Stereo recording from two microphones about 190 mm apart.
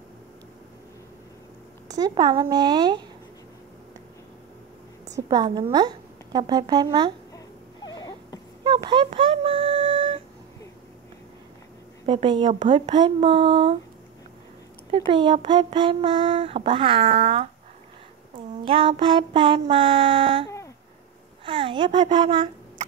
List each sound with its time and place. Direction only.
1.9 s speech: 20° right (ahead or behind)
5.1 s speech: 20° right (ahead or behind)
7.3 s a sound: 20° left (ahead or behind)
8.6 s a sound: 25° right (ahead or behind)
12.1 s speech: 25° right (ahead or behind)
14.9 s speech: 25° right (ahead or behind)
21.5 s a woman's voice: 25° right (ahead or behind)